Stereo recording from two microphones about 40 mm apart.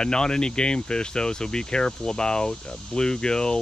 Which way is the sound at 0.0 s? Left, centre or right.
Centre.